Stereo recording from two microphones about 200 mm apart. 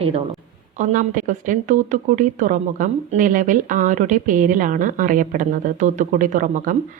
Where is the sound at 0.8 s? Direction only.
40° right (ahead or behind).